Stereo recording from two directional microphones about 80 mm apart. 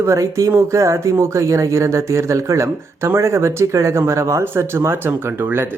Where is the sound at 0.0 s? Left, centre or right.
Right.